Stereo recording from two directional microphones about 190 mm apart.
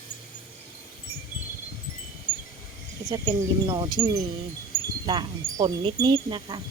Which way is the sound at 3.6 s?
25° right (ahead or behind).